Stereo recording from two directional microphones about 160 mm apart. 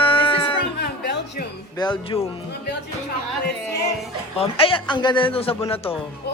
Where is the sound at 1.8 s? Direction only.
30° left (ahead or behind).